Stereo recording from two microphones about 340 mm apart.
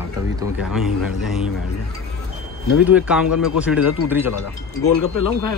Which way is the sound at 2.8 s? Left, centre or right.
Centre.